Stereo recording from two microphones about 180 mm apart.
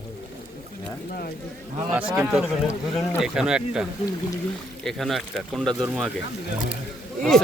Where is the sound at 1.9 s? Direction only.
5° right (ahead or behind).